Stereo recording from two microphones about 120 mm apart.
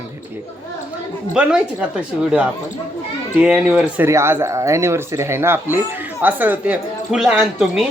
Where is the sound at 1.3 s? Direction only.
10° right (ahead or behind).